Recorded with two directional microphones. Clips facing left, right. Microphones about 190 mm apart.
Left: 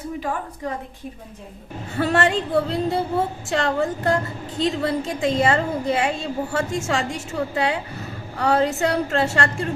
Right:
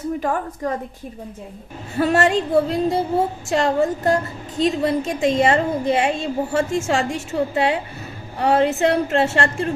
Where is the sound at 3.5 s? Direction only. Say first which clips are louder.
Right 4 dB; 25° right (ahead or behind).